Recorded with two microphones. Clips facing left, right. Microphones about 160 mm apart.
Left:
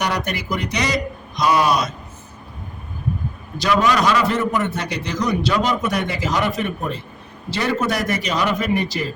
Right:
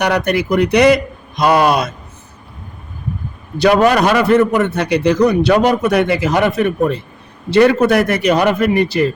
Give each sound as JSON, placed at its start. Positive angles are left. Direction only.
{"t": 0.0, "sound": "a man's voice", "side_deg": -65}
{"t": 3.6, "sound": "a man's voice", "side_deg": -60}